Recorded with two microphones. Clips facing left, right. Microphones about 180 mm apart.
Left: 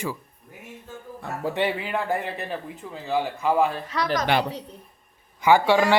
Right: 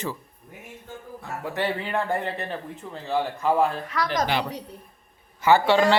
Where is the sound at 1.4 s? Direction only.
20° left (ahead or behind).